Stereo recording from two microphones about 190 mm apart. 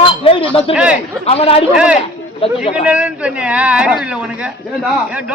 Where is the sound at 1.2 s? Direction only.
30° left (ahead or behind).